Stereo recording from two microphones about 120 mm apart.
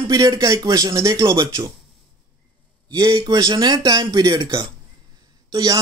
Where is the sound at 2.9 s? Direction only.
35° right (ahead or behind).